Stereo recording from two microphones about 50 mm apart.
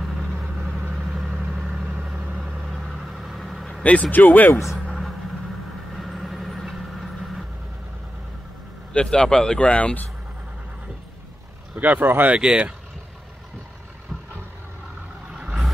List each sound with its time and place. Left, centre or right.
2.3 s vehicle: centre
3.8 s speech: left
4.1 s speech: left
5.9 s vehicle: centre
8.9 s speech: centre
11.7 s speech: right
12.3 s speech: centre